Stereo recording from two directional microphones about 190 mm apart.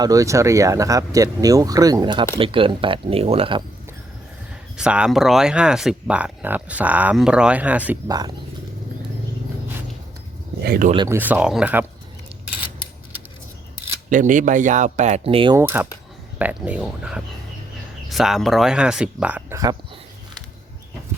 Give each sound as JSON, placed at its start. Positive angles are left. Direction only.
{"t": 0.0, "sound": "speech", "side_deg": -20}
{"t": 4.8, "sound": "speech", "side_deg": -5}
{"t": 8.0, "sound": "speech", "side_deg": -20}
{"t": 10.6, "sound": "speech", "side_deg": -50}
{"t": 10.9, "sound": "speech", "side_deg": -20}
{"t": 11.2, "sound": "speech", "side_deg": -10}
{"t": 14.1, "sound": "speech", "side_deg": -45}
{"t": 15.5, "sound": "speech", "side_deg": -10}